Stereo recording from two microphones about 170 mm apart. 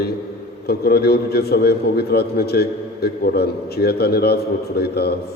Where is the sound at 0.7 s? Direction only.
70° left (ahead or behind).